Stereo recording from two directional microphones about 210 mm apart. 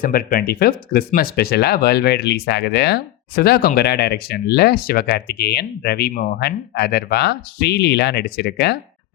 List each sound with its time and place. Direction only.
0.0 s speech: 45° left (ahead or behind)